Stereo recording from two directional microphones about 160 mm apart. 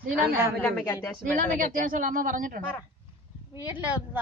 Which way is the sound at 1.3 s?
55° right (ahead or behind).